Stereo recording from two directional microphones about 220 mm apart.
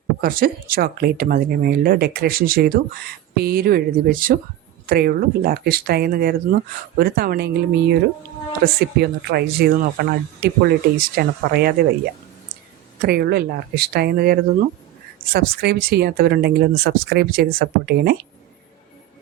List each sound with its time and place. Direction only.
0.2 s speech: 40° right (ahead or behind)
13.0 s speech: 45° right (ahead or behind)